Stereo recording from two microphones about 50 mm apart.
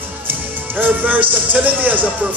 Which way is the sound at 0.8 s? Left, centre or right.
Right.